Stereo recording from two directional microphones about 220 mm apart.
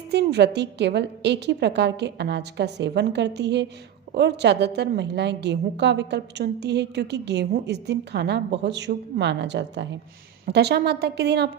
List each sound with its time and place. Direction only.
0.1 s a woman's voice: 50° right (ahead or behind)